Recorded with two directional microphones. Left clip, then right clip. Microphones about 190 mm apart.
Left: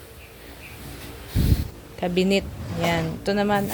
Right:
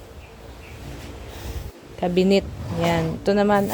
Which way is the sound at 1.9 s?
10° right (ahead or behind).